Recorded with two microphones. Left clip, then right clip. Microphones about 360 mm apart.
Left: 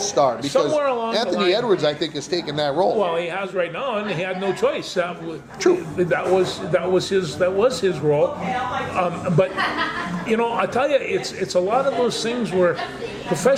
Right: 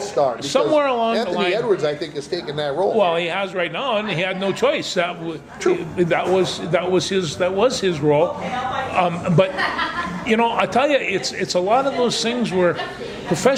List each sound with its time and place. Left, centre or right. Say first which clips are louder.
0.2 s a man's voice: left 1 dB; left
0.5 s a man's voice: right 2 dB; right
1.1 s a man's voice: even; left
3.0 s a man's voice: right 3 dB; right
5.7 s a man's voice: left 1 dB; left
6.0 s a man's voice: right 4 dB; right